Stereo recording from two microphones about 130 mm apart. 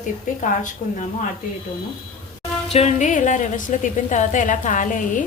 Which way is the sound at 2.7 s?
55° left (ahead or behind).